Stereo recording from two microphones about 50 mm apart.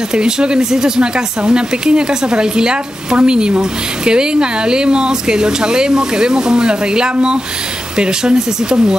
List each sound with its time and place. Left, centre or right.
0.1 s speech: centre